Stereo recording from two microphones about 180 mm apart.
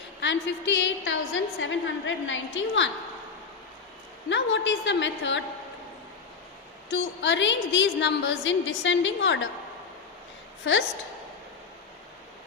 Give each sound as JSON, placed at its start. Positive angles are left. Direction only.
{"t": 0.2, "sound": "a woman's voice", "side_deg": 85}
{"t": 4.3, "sound": "a woman's voice", "side_deg": 85}
{"t": 6.9, "sound": "a woman's voice", "side_deg": 90}
{"t": 10.7, "sound": "a woman's voice", "side_deg": 90}